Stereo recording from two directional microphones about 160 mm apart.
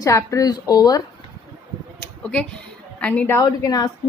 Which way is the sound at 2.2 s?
5° left (ahead or behind).